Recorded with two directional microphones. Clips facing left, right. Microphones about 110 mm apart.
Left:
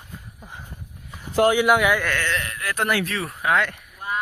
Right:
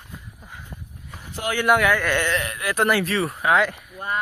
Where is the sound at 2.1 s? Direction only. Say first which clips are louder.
Right 3 dB; 15° right (ahead or behind).